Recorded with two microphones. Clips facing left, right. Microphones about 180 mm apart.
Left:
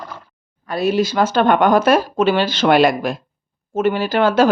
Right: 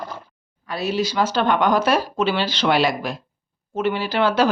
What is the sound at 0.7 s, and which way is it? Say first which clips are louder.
Speech: left 6 dB; 50° left (ahead or behind).